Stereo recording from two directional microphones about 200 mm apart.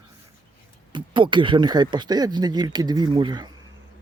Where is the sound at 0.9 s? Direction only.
25° right (ahead or behind).